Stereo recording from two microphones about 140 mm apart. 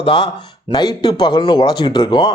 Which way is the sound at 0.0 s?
35° left (ahead or behind).